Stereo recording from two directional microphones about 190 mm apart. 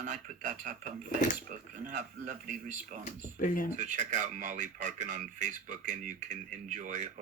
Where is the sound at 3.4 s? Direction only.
45° left (ahead or behind).